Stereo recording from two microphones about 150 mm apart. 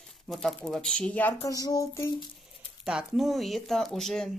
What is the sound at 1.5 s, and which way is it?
Speech, 25° left (ahead or behind).